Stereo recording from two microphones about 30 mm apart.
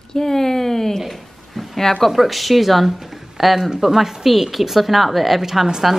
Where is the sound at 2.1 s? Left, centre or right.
Centre.